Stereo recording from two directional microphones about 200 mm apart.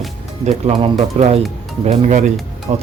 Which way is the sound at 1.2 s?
30° right (ahead or behind).